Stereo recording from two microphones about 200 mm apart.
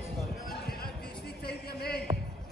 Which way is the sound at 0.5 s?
50° left (ahead or behind).